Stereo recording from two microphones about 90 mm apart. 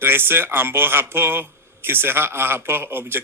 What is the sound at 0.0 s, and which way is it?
A man's voice, 25° right (ahead or behind).